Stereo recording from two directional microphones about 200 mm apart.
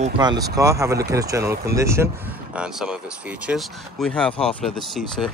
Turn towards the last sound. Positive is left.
turn(degrees=5)  # may be behind; listen again after turning